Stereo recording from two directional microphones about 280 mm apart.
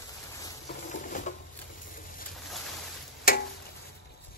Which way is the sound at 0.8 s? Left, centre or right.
Left.